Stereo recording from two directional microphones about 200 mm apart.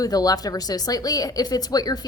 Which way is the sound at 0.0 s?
20° left (ahead or behind).